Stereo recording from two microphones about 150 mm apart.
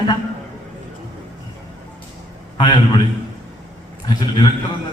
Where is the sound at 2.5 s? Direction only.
30° left (ahead or behind).